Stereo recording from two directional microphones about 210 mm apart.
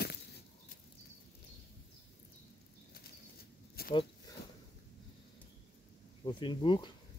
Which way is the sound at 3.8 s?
45° left (ahead or behind).